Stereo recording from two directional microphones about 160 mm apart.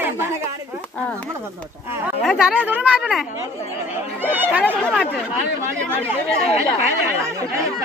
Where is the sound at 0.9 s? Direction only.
10° left (ahead or behind).